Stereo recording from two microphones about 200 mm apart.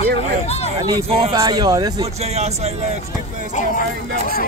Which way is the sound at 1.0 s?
30° right (ahead or behind).